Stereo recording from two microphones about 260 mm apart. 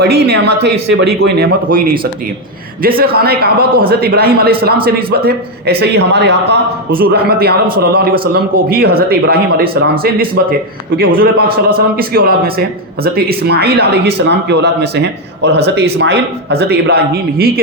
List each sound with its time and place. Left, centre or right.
0.0 s a man's voice: right
3.0 s a man's voice: right